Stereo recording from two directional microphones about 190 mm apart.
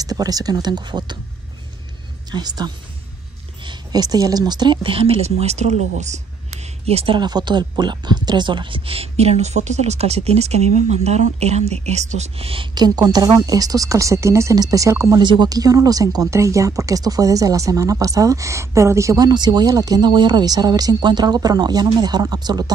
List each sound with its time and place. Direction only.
0.0 s speech: 20° right (ahead or behind)
2.3 s speech: 20° right (ahead or behind)